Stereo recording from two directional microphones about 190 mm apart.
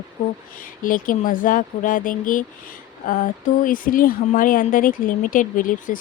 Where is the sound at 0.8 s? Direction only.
45° left (ahead or behind).